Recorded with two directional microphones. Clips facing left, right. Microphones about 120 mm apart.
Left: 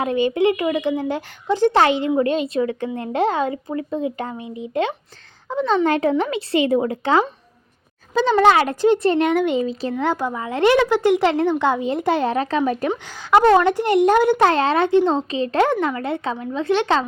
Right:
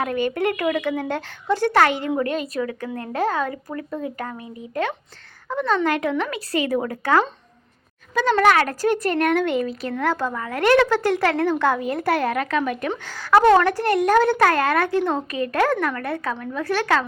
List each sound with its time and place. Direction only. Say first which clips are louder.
0.0 s speech: left 4 dB; 25° left (ahead or behind)
12.9 s a woman's voice: right 2 dB; 15° left (ahead or behind)